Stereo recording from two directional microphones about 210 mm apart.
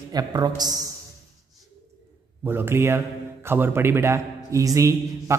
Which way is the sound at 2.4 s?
10° right (ahead or behind).